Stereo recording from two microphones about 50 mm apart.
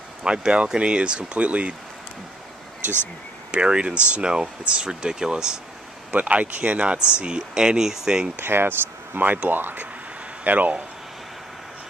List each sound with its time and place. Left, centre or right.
0.2 s speech: centre
3.5 s speech: right
6.1 s speech: right; by 8.3 s centre
8.4 s speech: right